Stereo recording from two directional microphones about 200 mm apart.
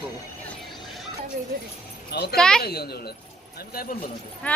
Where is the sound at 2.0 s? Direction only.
55° left (ahead or behind).